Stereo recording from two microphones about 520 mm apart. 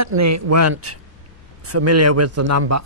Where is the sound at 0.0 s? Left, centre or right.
Right.